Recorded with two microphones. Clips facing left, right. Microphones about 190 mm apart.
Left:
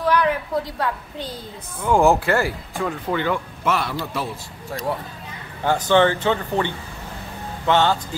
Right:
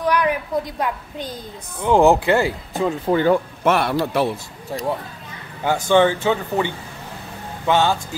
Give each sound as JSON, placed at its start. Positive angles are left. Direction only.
{"t": 0.0, "sound": "a woman's voice", "side_deg": -15}
{"t": 3.2, "sound": "speech", "side_deg": -40}
{"t": 4.0, "sound": "a man's voice", "side_deg": -65}
{"t": 5.6, "sound": "speech", "side_deg": -10}